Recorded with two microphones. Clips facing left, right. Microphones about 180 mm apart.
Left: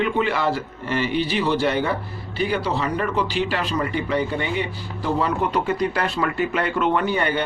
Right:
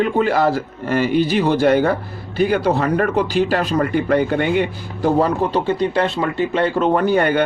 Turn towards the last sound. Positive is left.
turn(degrees=-50)  # may be behind; listen again after turning